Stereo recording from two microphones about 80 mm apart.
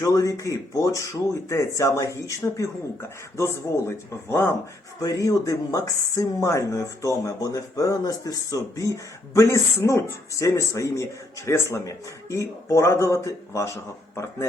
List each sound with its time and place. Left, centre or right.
0.0 s speech: left
4.9 s speech: left